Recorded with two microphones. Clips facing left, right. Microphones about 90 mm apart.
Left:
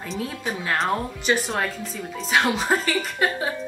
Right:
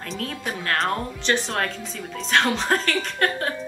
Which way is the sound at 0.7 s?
5° left (ahead or behind).